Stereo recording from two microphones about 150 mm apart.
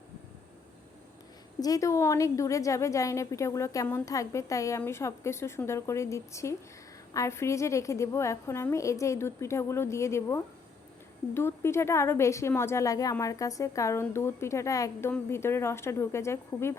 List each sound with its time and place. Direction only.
1.6 s a woman's voice: 20° left (ahead or behind)